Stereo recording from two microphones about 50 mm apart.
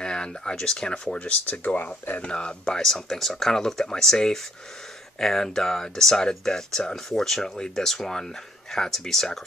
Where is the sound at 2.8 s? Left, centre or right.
Centre.